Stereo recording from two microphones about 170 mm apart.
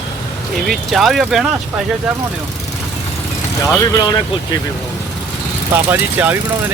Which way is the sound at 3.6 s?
20° left (ahead or behind).